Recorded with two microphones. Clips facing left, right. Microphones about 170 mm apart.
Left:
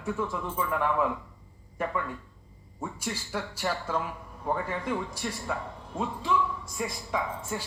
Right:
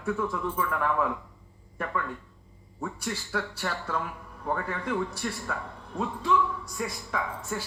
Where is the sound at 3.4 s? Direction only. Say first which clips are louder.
Left 2 dB; 20° left (ahead or behind).